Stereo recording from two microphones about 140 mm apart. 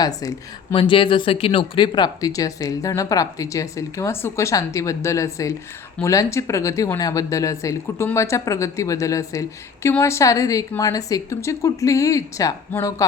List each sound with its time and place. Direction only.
0.0 s speech: 25° left (ahead or behind)
0.7 s speech: 40° left (ahead or behind)